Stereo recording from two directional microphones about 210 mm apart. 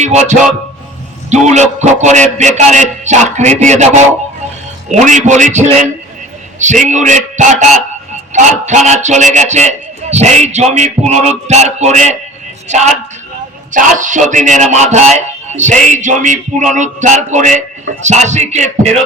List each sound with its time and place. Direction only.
0.0 s a man's voice: 35° right (ahead or behind)
4.9 s a man's voice: 35° right (ahead or behind)